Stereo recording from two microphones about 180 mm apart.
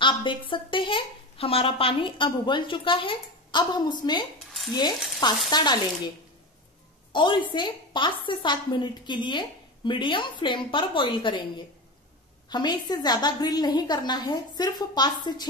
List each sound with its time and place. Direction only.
0.0 s a woman's voice: 25° left (ahead or behind)
5.5 s a woman's voice: 25° left (ahead or behind)